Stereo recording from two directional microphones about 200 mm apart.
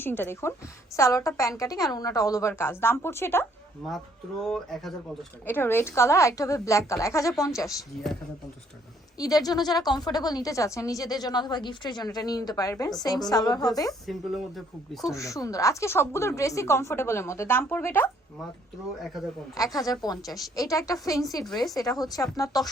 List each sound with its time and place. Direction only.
0.0 s speech: 10° left (ahead or behind)
4.4 s speech: centre (ahead or behind)
9.1 s a woman's voice: 20° left (ahead or behind)
14.1 s speech: centre (ahead or behind)
15.1 s speech: 15° left (ahead or behind)
19.5 s a woman's voice: 15° left (ahead or behind)